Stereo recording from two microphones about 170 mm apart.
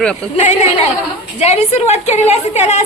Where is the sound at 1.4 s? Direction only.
40° left (ahead or behind).